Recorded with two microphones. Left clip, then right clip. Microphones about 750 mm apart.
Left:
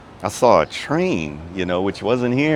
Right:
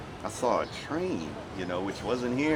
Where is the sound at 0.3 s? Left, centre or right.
Left.